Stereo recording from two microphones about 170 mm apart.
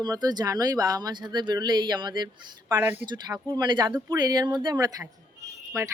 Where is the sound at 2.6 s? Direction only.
10° right (ahead or behind).